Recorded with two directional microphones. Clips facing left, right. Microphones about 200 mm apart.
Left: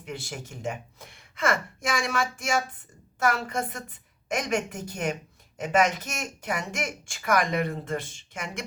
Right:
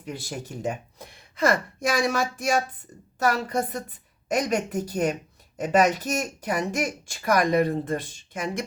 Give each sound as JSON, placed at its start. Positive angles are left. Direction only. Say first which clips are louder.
{"t": 0.0, "sound": "speech", "louder": "right 3 dB", "side_deg": -35}